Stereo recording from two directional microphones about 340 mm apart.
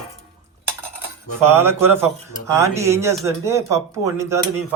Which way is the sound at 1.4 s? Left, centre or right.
Centre.